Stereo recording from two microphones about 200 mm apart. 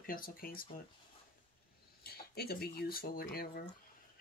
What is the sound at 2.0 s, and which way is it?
Speech, 50° left (ahead or behind).